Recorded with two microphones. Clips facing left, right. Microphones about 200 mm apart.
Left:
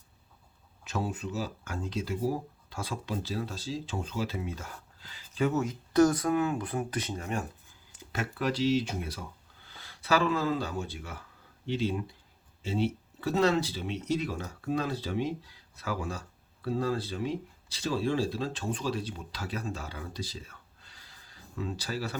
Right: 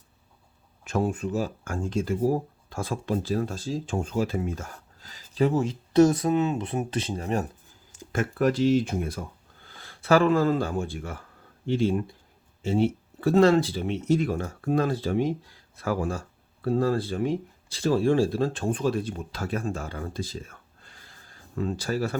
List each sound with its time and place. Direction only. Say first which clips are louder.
0.9 s speech: right 7 dB; 50° right (ahead or behind); by 7.4 s 35° right (ahead or behind)
7.9 s speech: right 8 dB; 50° right (ahead or behind)